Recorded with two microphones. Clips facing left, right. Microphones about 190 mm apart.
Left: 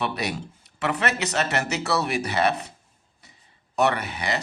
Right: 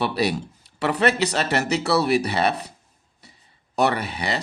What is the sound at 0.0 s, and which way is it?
Speech, 30° right (ahead or behind).